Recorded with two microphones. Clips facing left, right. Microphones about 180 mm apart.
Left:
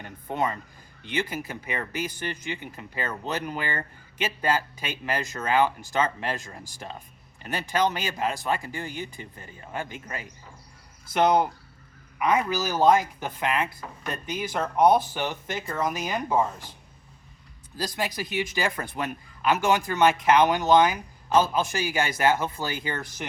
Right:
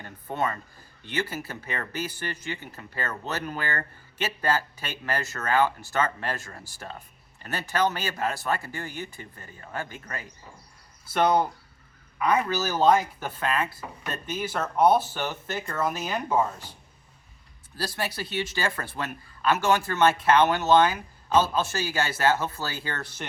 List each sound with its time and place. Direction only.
0.0 s speech: 15° left (ahead or behind)
12.5 s speech: 15° left (ahead or behind)
17.7 s speech: 15° left (ahead or behind)